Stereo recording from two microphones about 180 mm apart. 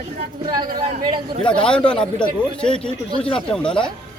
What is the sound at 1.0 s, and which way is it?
Speech, 25° right (ahead or behind).